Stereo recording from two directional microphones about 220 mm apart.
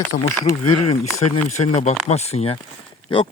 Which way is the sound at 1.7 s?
30° left (ahead or behind).